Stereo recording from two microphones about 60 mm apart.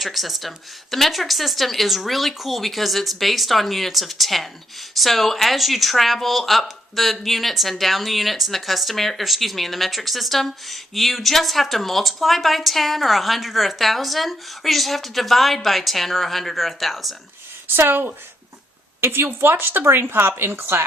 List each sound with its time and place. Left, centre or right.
0.0 s speech: centre
17.7 s speech: right